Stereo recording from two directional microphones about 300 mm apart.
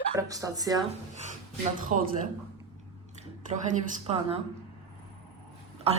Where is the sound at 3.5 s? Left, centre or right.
Right.